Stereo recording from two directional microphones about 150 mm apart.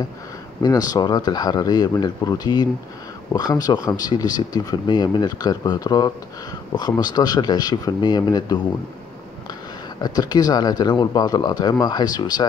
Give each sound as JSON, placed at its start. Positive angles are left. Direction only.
{"t": 0.6, "sound": "speech", "side_deg": 25}
{"t": 10.0, "sound": "speech", "side_deg": 25}